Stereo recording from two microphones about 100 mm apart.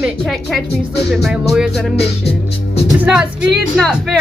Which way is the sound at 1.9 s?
90° left.